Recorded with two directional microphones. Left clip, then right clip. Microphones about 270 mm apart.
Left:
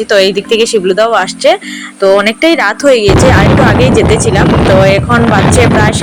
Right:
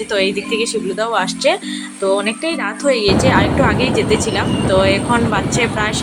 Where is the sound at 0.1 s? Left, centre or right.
Centre.